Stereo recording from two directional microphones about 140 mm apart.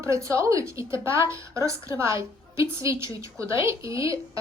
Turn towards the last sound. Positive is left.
turn(degrees=-20)  # may be behind; listen again after turning